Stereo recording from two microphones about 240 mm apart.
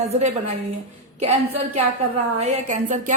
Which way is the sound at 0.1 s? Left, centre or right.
Right.